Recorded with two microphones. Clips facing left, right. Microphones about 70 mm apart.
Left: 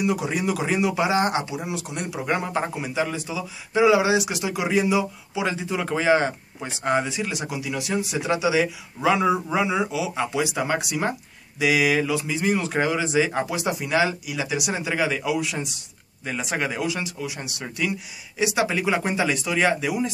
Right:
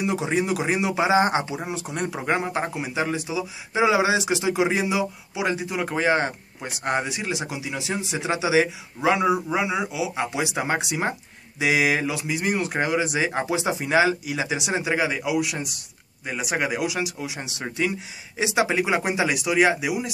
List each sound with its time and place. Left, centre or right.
0.0 s speech: right
2.3 s a man's voice: centre
9.1 s a man's voice: centre
10.3 s speech: right
12.2 s a man's voice: centre
13.7 s speech: right
14.4 s a man's voice: right